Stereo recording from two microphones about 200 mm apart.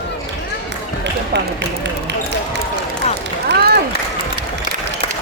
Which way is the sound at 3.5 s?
55° right (ahead or behind).